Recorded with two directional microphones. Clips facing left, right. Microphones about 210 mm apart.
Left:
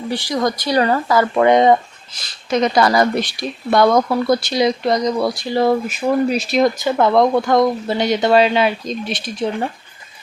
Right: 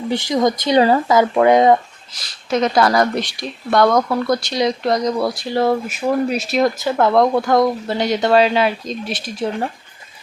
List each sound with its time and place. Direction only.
0.1 s speech: 20° right (ahead or behind)
1.3 s speech: 5° right (ahead or behind)